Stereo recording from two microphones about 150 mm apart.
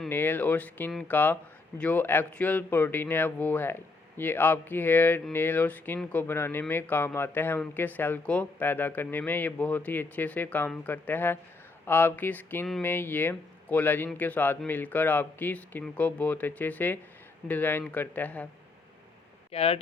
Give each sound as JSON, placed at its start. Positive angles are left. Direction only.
{"t": 0.1, "sound": "speech", "side_deg": 15}
{"t": 19.5, "sound": "speech", "side_deg": 40}